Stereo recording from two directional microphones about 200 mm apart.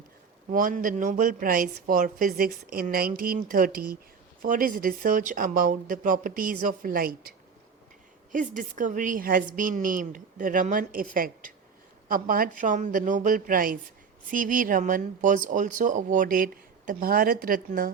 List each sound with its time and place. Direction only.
0.5 s speech: 40° right (ahead or behind)
8.3 s speech: 40° right (ahead or behind)